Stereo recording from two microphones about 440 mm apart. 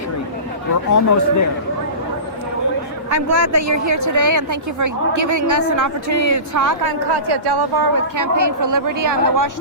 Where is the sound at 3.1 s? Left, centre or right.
Right.